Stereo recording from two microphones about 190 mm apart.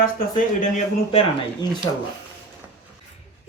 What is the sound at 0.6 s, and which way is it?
Speech, 35° left (ahead or behind).